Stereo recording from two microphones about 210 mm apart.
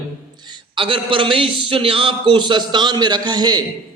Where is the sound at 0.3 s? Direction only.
20° right (ahead or behind).